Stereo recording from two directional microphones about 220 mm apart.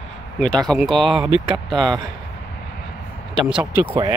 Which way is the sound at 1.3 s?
25° right (ahead or behind).